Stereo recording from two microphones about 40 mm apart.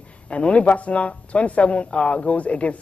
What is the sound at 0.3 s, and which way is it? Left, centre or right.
Speech, left.